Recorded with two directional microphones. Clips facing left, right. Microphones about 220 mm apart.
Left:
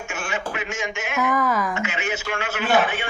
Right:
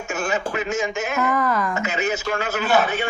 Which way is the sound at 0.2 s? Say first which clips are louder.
Right 5 dB; 40° right (ahead or behind).